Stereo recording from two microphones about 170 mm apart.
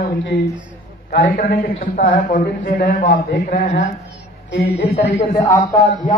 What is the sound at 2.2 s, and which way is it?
A man's voice, 50° left (ahead or behind).